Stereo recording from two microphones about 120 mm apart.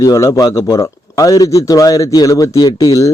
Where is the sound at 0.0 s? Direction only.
30° left (ahead or behind).